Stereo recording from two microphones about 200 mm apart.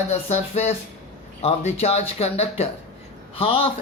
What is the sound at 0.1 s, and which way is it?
Speech, 35° left (ahead or behind).